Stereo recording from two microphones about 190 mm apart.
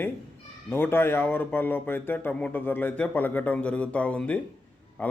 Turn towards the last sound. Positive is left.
turn(degrees=10)  # may be behind; listen again after turning